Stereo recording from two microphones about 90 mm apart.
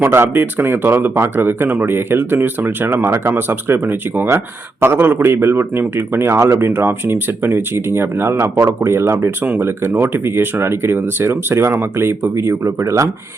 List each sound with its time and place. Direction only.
0.0 s speech: 25° right (ahead or behind)